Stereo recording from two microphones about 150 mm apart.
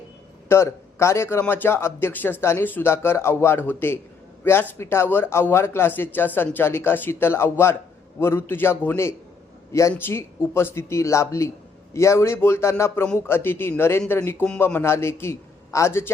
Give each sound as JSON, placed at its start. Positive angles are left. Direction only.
{"t": 0.4, "sound": "a man's voice", "side_deg": 15}